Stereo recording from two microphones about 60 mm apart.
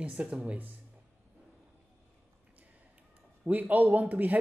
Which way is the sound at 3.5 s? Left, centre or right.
Right.